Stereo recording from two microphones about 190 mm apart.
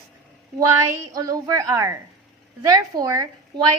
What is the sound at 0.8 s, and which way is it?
A woman's voice, 15° right (ahead or behind).